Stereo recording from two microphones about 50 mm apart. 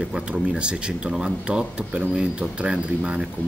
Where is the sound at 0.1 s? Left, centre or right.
Centre.